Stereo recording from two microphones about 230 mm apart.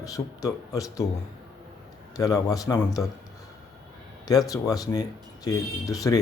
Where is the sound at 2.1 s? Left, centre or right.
Centre.